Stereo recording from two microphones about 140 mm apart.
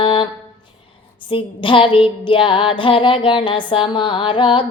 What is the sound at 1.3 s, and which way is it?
Music, 35° left (ahead or behind).